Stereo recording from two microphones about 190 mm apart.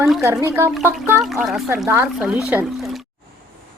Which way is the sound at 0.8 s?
5° right (ahead or behind).